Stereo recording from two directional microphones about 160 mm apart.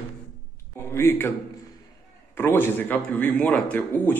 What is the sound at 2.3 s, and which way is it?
A man's voice, 15° left (ahead or behind).